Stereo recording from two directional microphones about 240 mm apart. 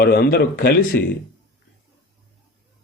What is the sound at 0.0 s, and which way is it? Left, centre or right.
Speech, left.